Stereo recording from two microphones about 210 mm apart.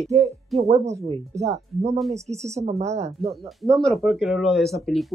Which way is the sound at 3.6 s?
Centre (ahead or behind).